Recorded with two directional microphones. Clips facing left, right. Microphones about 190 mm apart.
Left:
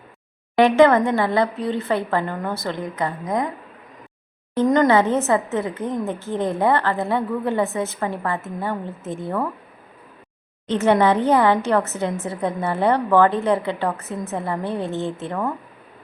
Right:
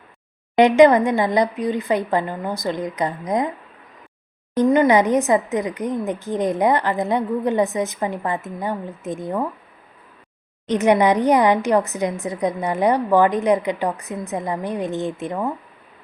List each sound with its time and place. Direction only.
0.5 s a woman's voice: 20° right (ahead or behind)
4.7 s a woman's voice: 15° right (ahead or behind)
10.7 s a woman's voice: 15° right (ahead or behind)